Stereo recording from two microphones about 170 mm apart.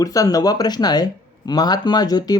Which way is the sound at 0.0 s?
20° left (ahead or behind).